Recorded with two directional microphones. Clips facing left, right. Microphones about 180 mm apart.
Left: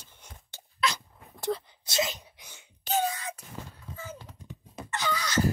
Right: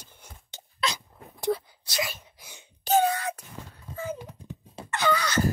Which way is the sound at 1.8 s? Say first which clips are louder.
Left 2 dB; 20° left (ahead or behind).